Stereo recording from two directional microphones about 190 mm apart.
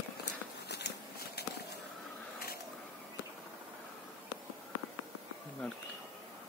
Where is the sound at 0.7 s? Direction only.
60° left (ahead or behind).